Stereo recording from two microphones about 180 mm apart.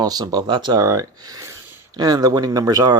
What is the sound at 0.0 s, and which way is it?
Speech, 20° right (ahead or behind).